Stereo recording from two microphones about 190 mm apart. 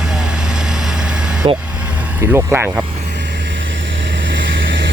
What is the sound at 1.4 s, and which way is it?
Speech, 30° right (ahead or behind).